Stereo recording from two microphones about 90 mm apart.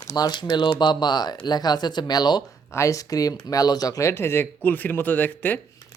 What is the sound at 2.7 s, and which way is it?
Speech, 35° left (ahead or behind).